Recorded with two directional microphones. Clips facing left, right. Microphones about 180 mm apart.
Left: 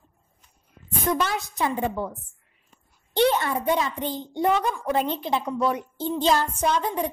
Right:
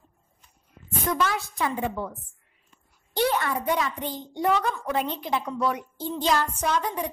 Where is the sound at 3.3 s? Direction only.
25° left (ahead or behind).